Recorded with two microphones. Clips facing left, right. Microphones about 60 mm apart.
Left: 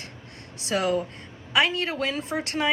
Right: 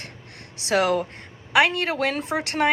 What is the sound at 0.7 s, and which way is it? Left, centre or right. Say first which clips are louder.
Speech: right 4 dB; right.